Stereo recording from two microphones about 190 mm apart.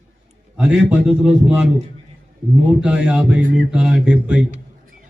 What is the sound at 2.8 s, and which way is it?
A man's voice, 5° right (ahead or behind).